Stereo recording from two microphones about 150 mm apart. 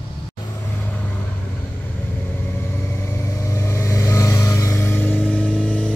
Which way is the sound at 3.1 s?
20° left (ahead or behind).